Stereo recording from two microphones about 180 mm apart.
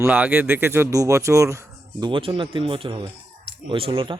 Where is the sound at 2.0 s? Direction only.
25° right (ahead or behind).